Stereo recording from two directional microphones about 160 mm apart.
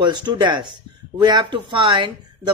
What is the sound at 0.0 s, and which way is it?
Speech, 25° right (ahead or behind).